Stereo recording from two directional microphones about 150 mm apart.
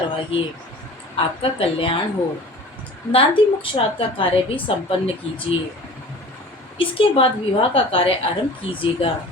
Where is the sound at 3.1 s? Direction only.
40° left (ahead or behind).